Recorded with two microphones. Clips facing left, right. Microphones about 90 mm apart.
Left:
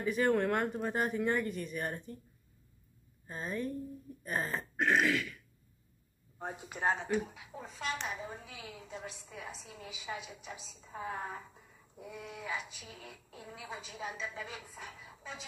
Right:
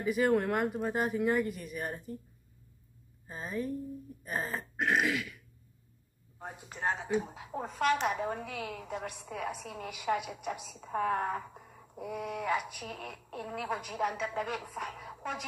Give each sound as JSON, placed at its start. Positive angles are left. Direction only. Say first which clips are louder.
{"t": 0.0, "sound": "speech", "louder": "right 2 dB", "side_deg": -10}
{"t": 3.3, "sound": "speech", "louder": "right 1 dB", "side_deg": -5}
{"t": 6.3, "sound": "speech", "louder": "left 2 dB", "side_deg": 5}
{"t": 7.2, "sound": "a woman's voice", "louder": "right 8 dB", "side_deg": -45}